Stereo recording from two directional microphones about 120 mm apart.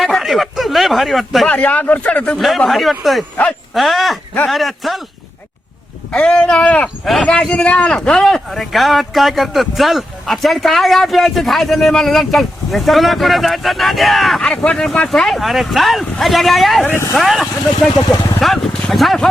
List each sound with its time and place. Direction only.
0.0 s a sound: centre (ahead or behind)
1.5 s speech: 15° left (ahead or behind)
2.4 s speech: centre (ahead or behind)
6.1 s speech: 10° left (ahead or behind)
16.8 s speech: 20° left (ahead or behind)
17.2 s speech: centre (ahead or behind)